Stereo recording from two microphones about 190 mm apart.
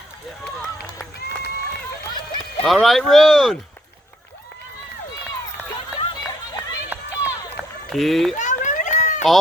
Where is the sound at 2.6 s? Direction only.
Centre (ahead or behind).